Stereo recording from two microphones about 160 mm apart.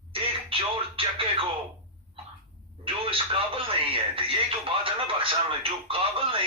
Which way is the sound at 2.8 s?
35° right (ahead or behind).